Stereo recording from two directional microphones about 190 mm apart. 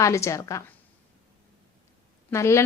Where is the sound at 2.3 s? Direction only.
15° left (ahead or behind).